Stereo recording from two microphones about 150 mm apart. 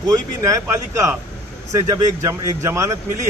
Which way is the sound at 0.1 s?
20° right (ahead or behind).